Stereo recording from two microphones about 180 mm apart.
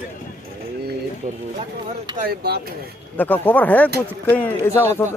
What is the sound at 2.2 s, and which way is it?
Speech, 60° right (ahead or behind).